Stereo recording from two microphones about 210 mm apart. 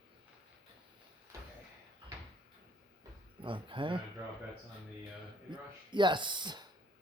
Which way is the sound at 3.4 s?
25° right (ahead or behind).